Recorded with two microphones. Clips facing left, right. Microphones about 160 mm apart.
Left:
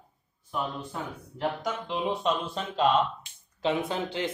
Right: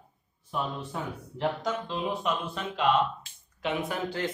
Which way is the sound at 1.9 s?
30° left (ahead or behind).